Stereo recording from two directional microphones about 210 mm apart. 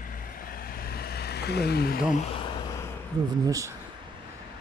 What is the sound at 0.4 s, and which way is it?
Vehicle, 45° left (ahead or behind).